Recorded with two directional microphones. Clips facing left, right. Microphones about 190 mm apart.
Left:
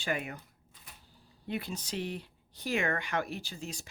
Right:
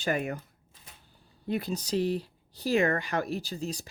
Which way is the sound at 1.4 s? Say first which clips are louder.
Right 6 dB; 40° right (ahead or behind).